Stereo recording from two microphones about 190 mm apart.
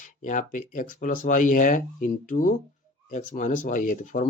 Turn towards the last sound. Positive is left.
turn(degrees=45)  # may be behind; listen again after turning